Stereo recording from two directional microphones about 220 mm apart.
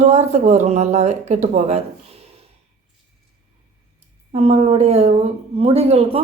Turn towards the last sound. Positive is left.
turn(degrees=-25)  # may be behind; listen again after turning